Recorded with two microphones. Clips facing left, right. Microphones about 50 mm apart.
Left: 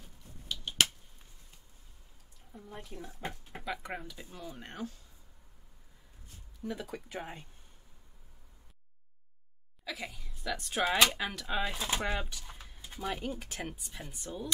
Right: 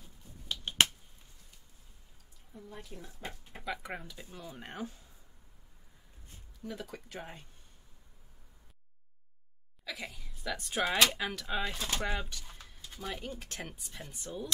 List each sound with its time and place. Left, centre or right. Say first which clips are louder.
0.5 s finger snapping: right 2 dB; right
2.5 s speech: left 1 dB; centre
2.9 s speech: left 3 dB; left
3.6 s speech: even; centre
6.7 s speech: left 3 dB; centre
9.8 s speech: left 1 dB; centre